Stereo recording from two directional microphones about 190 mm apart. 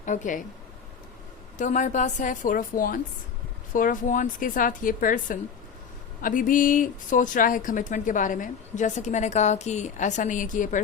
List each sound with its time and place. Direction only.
0.0 s a woman's voice: 40° left (ahead or behind)
1.5 s a woman's voice: 40° left (ahead or behind)